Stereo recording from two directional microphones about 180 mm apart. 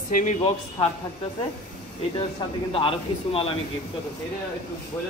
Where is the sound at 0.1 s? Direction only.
45° left (ahead or behind).